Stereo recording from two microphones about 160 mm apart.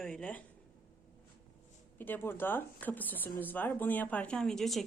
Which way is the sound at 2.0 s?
15° left (ahead or behind).